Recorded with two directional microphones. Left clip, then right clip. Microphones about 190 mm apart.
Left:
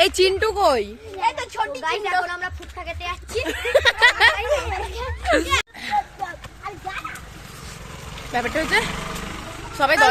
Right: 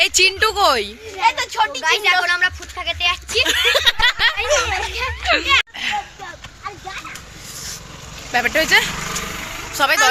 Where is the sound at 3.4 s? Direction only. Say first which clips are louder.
Right 3 dB; 35° left (ahead or behind).